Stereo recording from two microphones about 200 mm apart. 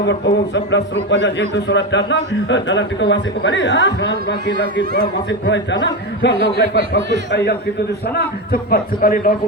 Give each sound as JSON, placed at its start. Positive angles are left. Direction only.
{"t": 0.0, "sound": "a man's voice", "side_deg": 60}
{"t": 8.7, "sound": "a man's voice", "side_deg": 45}